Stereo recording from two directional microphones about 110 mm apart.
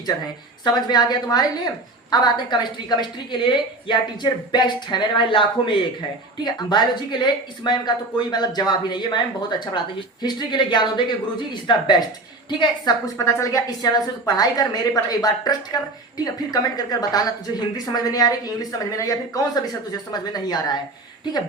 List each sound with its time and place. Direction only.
0.6 s a woman's voice: 40° left (ahead or behind)
13.1 s a woman's voice: 30° left (ahead or behind)